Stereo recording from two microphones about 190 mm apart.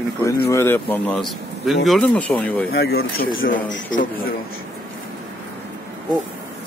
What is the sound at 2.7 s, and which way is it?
Speech, 55° left (ahead or behind).